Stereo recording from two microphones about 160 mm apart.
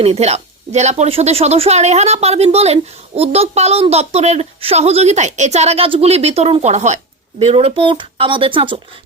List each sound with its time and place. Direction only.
0.0 s a woman's voice: 40° right (ahead or behind)